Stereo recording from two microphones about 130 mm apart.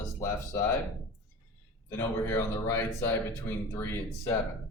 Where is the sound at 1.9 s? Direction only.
20° left (ahead or behind).